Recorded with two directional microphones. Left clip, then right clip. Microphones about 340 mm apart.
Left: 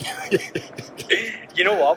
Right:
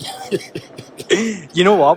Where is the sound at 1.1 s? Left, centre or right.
Centre.